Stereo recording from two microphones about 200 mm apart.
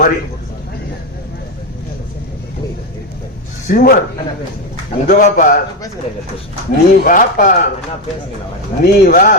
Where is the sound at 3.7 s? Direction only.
45° left (ahead or behind).